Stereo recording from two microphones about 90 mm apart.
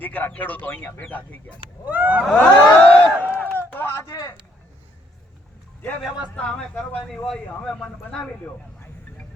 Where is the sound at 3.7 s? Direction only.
25° left (ahead or behind).